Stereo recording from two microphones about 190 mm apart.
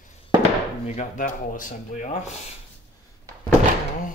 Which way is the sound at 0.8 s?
40° left (ahead or behind).